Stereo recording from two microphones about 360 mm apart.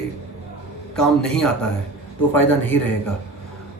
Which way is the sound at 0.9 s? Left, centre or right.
Centre.